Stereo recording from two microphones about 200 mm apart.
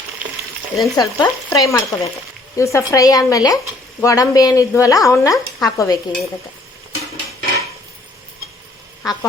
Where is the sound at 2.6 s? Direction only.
15° left (ahead or behind).